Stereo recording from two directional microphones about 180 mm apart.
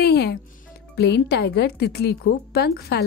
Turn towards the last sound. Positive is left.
turn(degrees=60)  # may be behind; listen again after turning